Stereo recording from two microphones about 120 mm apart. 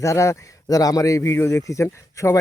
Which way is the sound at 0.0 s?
25° left (ahead or behind).